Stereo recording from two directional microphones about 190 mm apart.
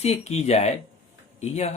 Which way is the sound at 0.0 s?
35° left (ahead or behind).